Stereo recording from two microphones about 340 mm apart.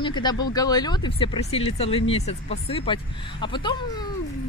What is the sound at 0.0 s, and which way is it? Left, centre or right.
Speech, centre.